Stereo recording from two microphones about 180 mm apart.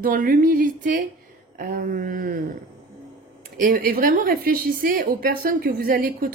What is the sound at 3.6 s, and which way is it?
A woman's voice, 50° right (ahead or behind).